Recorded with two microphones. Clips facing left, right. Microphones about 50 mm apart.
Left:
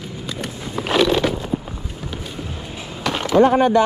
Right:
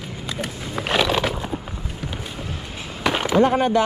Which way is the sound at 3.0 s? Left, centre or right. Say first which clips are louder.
Even; centre.